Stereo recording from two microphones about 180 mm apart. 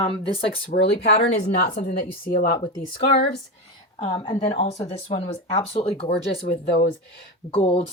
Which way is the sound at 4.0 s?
30° left (ahead or behind).